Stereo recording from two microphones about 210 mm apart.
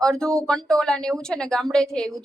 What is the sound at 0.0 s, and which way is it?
Speech, 5° left (ahead or behind).